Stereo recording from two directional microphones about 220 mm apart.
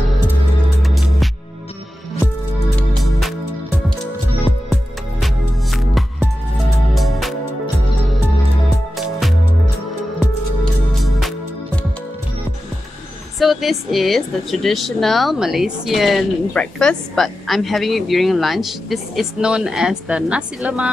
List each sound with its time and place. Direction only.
0.8 s music: centre (ahead or behind)
3.0 s music: centre (ahead or behind)
5.2 s music: centre (ahead or behind)
8.6 s music: centre (ahead or behind)
10.6 s music: centre (ahead or behind)
13.4 s speech: centre (ahead or behind)